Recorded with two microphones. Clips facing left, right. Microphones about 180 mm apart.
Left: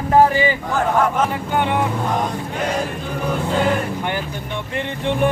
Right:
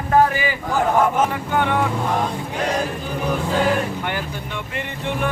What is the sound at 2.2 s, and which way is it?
Chant, centre (ahead or behind).